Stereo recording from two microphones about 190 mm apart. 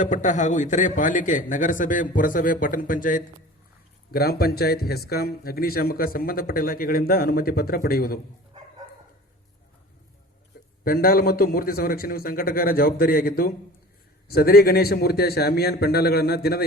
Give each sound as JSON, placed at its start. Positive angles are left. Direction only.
{"t": 0.0, "sound": "a man's voice", "side_deg": 40}
{"t": 4.1, "sound": "a man's voice", "side_deg": 55}
{"t": 10.8, "sound": "a man's voice", "side_deg": 50}